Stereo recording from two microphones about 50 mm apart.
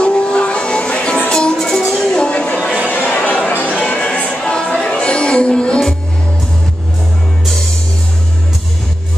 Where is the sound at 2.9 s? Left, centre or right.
Left.